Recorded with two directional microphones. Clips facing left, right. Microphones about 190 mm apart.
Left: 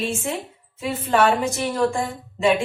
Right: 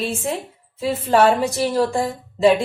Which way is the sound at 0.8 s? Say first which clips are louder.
Right 3 dB; 35° right (ahead or behind).